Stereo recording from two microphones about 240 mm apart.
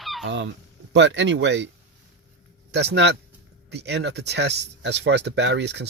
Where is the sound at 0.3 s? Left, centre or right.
Right.